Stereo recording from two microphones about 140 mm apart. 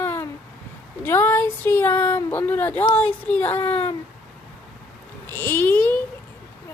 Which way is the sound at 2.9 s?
10° left (ahead or behind).